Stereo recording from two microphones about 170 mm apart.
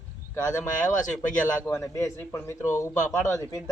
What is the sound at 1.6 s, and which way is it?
A man's voice, 15° left (ahead or behind).